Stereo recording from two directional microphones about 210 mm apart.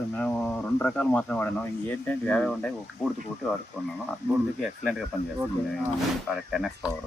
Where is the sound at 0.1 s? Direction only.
5° left (ahead or behind).